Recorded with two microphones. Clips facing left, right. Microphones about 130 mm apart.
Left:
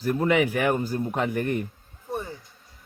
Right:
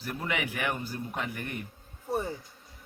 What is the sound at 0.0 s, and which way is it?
A man's voice, 45° left (ahead or behind).